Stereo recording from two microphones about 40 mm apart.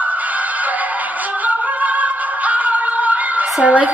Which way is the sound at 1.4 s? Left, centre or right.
Right.